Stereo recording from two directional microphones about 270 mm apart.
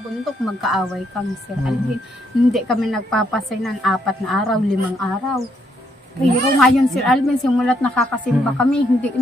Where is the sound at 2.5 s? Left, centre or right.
Centre.